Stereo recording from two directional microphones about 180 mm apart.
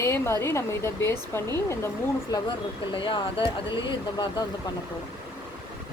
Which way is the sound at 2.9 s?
25° left (ahead or behind).